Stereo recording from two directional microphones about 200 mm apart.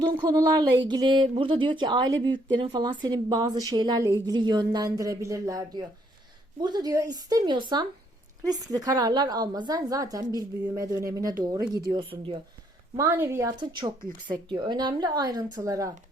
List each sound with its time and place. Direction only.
0.3 s a woman's voice: 20° right (ahead or behind)
13.0 s a woman's voice: 15° right (ahead or behind)